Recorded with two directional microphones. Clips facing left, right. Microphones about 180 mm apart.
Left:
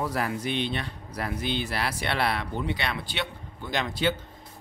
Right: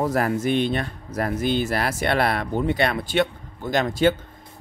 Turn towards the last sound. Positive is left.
turn(degrees=-45)  # may be behind; listen again after turning